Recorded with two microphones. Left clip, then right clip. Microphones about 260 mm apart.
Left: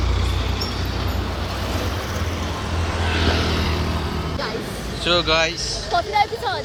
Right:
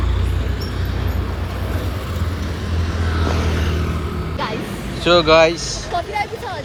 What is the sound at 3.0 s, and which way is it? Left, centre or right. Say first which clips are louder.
Vehicle: left 2 dB; left.